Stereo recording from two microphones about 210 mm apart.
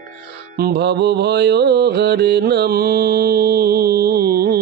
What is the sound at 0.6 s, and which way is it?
Mantra, 50° right (ahead or behind).